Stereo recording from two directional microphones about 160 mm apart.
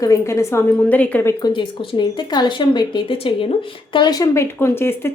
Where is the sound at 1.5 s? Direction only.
30° left (ahead or behind).